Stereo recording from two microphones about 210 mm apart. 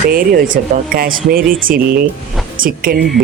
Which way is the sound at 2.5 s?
40° right (ahead or behind).